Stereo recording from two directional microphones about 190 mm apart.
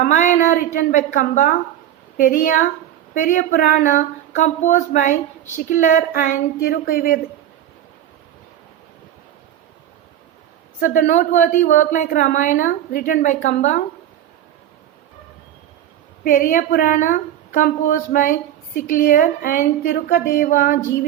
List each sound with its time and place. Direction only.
0.0 s a woman's voice: 40° left (ahead or behind)
10.8 s a woman's voice: 45° left (ahead or behind)
16.2 s a woman's voice: 45° left (ahead or behind)